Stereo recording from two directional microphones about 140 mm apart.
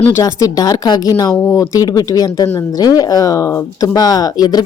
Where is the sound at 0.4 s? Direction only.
25° left (ahead or behind).